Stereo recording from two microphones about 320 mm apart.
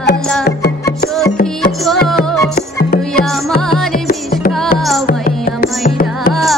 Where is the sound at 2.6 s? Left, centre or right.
Left.